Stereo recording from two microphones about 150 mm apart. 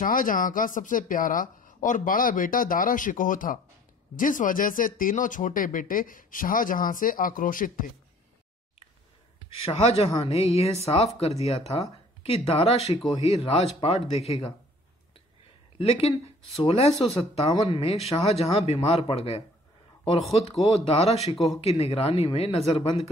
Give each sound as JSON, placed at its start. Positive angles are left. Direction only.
{"t": 0.0, "sound": "speech", "side_deg": 65}
{"t": 9.7, "sound": "speech", "side_deg": 40}
{"t": 15.8, "sound": "speech", "side_deg": 40}